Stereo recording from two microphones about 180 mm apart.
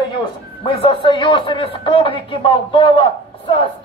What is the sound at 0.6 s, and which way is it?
A man's voice, 25° left (ahead or behind).